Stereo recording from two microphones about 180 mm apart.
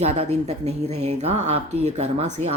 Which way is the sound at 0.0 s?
35° right (ahead or behind).